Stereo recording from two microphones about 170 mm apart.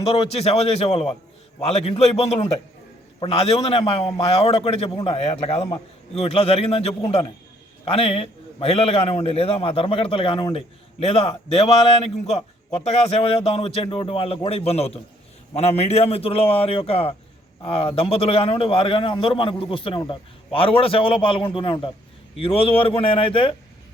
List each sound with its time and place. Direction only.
0.0 s a man's voice: 35° left (ahead or behind)